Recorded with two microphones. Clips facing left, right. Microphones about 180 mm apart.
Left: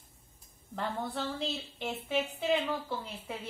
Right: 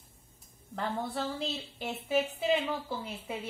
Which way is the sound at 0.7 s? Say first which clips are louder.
Right 1 dB; centre (ahead or behind).